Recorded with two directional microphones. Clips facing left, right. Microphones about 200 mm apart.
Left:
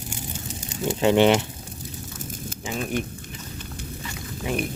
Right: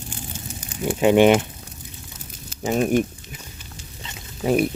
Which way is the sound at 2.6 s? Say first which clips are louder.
Right 9 dB; 45° right (ahead or behind).